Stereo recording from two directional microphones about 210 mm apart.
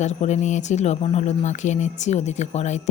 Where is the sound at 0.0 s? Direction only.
35° left (ahead or behind).